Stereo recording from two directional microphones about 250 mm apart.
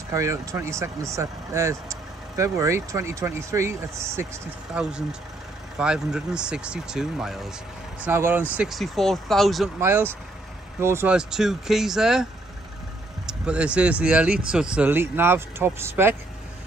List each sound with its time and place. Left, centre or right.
0.1 s speech: centre
13.3 s speech: centre